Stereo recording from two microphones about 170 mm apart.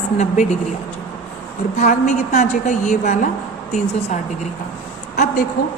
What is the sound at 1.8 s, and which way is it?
A woman's voice, 45° left (ahead or behind).